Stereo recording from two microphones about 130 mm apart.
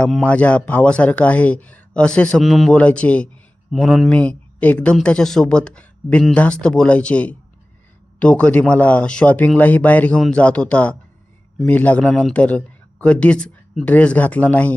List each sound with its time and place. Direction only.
0.0 s speech: 10° left (ahead or behind)